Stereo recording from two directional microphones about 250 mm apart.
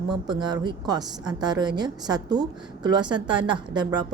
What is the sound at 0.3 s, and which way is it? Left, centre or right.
A woman's voice, centre.